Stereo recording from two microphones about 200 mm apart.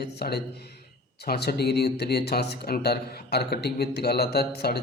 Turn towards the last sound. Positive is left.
turn(degrees=55)  # may be behind; listen again after turning